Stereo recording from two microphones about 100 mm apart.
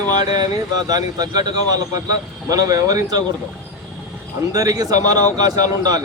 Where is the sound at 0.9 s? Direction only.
40° right (ahead or behind).